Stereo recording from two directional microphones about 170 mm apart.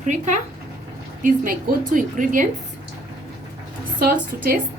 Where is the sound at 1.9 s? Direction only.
50° right (ahead or behind).